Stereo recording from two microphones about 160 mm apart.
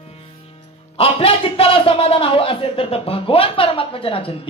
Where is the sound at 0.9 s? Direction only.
35° left (ahead or behind).